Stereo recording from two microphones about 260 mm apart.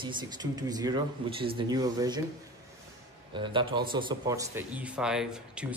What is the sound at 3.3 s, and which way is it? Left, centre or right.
Speech, centre.